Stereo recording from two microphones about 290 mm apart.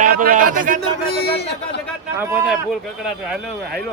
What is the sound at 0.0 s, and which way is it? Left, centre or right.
Speech, right.